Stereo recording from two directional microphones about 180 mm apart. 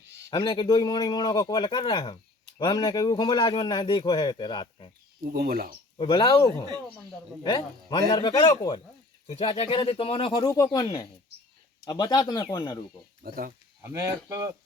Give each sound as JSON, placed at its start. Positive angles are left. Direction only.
{"t": 0.3, "sound": "speech", "side_deg": 25}
{"t": 5.2, "sound": "speech", "side_deg": -60}
{"t": 6.0, "sound": "speech", "side_deg": 25}
{"t": 9.2, "sound": "speech", "side_deg": 30}
{"t": 13.2, "sound": "speech", "side_deg": -55}
{"t": 13.8, "sound": "speech", "side_deg": -15}